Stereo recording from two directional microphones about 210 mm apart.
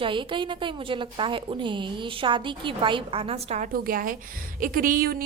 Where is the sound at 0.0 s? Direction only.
25° right (ahead or behind).